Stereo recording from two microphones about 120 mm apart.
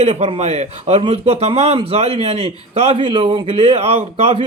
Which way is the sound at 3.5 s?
55° right (ahead or behind).